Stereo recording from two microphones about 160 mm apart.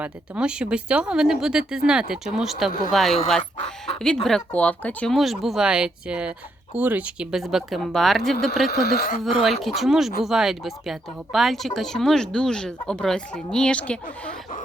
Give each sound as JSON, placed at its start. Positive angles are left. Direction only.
{"t": 0.0, "sound": "speech", "side_deg": -5}
{"t": 5.1, "sound": "speech", "side_deg": 0}
{"t": 8.7, "sound": "speech", "side_deg": 80}
{"t": 9.2, "sound": "speech", "side_deg": 0}